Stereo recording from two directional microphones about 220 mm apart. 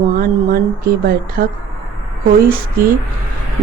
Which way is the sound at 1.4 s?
40° right (ahead or behind).